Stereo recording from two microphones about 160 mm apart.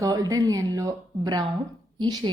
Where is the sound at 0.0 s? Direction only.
20° right (ahead or behind).